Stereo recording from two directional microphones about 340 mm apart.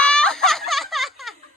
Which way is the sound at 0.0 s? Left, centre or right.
Centre.